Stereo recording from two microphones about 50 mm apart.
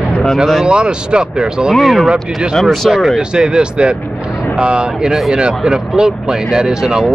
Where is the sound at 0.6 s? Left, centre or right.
Centre.